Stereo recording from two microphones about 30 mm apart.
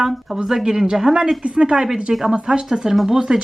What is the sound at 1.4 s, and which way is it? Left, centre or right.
Speech, right.